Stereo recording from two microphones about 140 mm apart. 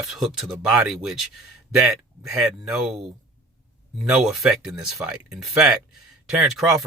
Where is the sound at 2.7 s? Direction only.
Centre (ahead or behind).